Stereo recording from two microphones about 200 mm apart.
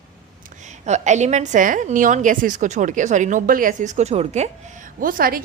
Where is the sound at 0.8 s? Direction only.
35° right (ahead or behind).